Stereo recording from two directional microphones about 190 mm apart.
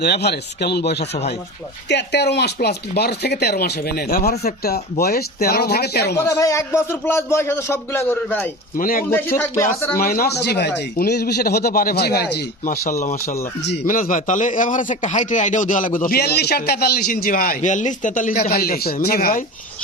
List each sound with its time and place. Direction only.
0.0 s speech: 60° left (ahead or behind)
6.1 s a man's voice: 15° left (ahead or behind)
8.8 s speech: 45° left (ahead or behind)
9.0 s a man's voice: 10° left (ahead or behind)
10.0 s speech: 50° left (ahead or behind)
13.2 s a man's voice: 15° left (ahead or behind)
13.7 s speech: 55° left (ahead or behind)